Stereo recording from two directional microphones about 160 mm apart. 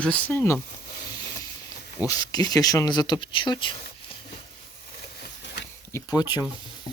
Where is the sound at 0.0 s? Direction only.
10° left (ahead or behind).